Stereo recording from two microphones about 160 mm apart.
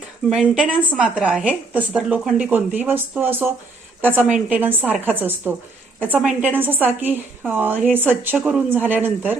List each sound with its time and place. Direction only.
0.3 s a woman's voice: 5° right (ahead or behind)